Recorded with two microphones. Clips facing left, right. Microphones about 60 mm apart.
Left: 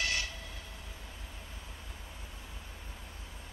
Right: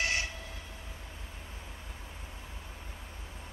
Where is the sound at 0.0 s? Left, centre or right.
Right.